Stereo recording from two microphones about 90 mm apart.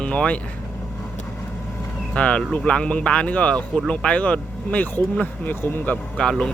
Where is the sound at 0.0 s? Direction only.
10° left (ahead or behind).